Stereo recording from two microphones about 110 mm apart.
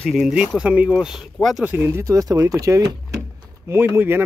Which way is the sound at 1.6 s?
20° right (ahead or behind).